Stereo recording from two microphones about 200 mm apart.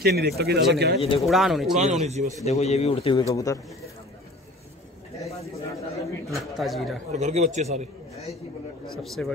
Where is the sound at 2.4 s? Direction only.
30° left (ahead or behind).